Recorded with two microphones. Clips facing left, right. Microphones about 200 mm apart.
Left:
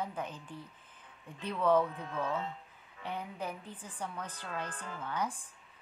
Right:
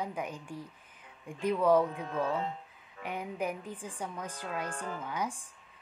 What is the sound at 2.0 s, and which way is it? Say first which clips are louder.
Speech: right 4 dB; 35° right (ahead or behind).